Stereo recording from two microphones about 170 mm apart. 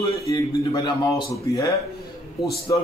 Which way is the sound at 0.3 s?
20° left (ahead or behind).